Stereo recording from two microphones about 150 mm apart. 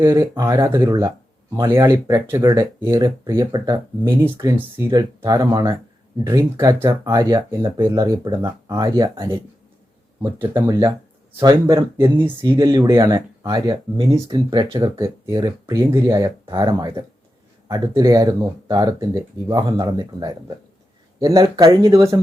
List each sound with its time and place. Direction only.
0.0 s speech: 15° right (ahead or behind)
10.4 s speech: 15° right (ahead or behind)
12.4 s speech: 25° right (ahead or behind)